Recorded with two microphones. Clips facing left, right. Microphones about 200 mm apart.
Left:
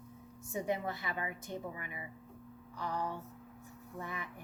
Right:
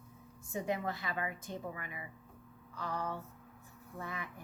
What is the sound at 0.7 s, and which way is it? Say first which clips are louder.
Speech: right 1 dB; 20° left (ahead or behind).